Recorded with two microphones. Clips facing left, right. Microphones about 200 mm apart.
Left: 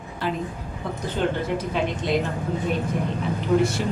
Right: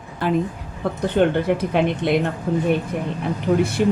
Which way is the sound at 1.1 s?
60° right (ahead or behind).